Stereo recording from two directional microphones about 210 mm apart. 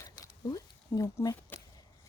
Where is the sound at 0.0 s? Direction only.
15° left (ahead or behind).